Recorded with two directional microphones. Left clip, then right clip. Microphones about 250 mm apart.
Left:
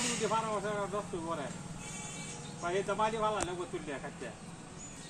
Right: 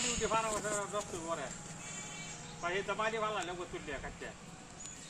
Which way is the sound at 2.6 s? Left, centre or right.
Left.